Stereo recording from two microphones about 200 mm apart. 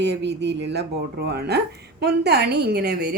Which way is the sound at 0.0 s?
60° right (ahead or behind).